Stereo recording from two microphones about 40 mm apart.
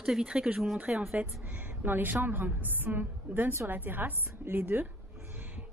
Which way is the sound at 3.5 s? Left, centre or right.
Right.